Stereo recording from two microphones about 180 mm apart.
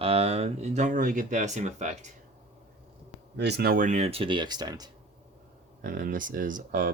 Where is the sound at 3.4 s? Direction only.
70° right (ahead or behind); by 4.9 s 20° right (ahead or behind).